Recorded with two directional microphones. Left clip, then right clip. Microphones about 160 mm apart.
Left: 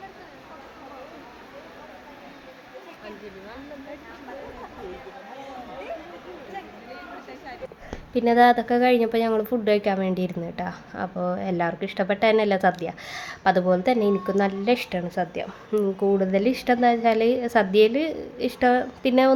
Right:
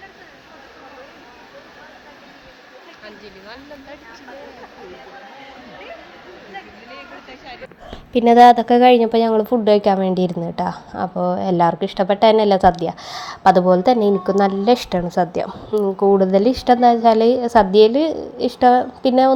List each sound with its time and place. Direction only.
8.1 s a woman's voice: 40° right (ahead or behind); by 19.3 s 15° right (ahead or behind)